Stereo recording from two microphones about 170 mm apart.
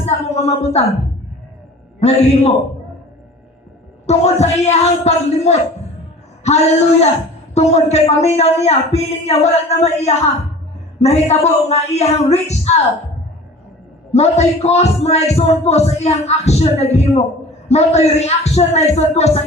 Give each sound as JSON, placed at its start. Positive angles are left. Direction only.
{"t": 0.0, "sound": "a sound", "side_deg": 40}
{"t": 2.0, "sound": "a man's voice", "side_deg": 40}
{"t": 4.0, "sound": "a man's voice", "side_deg": 40}
{"t": 14.1, "sound": "a man's voice", "side_deg": 40}